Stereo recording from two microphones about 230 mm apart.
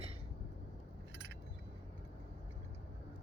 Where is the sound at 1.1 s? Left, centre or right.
Right.